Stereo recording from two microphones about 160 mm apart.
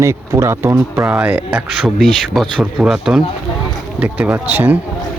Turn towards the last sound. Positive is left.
turn(degrees=-10)  # may be behind; listen again after turning